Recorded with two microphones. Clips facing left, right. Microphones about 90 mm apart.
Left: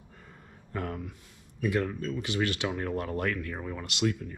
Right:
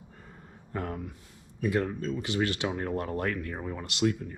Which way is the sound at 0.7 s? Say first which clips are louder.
Even; 25° right (ahead or behind).